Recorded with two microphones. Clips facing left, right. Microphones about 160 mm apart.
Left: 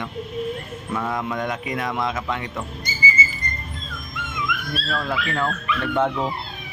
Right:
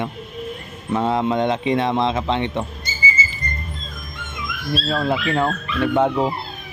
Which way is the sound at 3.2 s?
30° right (ahead or behind).